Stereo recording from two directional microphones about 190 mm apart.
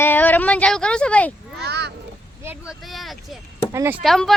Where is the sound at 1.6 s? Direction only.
60° right (ahead or behind).